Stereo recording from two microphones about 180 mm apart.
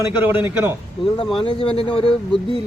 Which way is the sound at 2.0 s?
5° left (ahead or behind).